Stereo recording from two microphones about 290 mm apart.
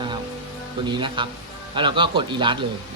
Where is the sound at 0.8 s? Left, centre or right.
Centre.